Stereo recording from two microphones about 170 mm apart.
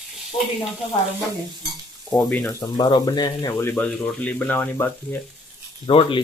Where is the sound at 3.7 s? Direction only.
5° left (ahead or behind).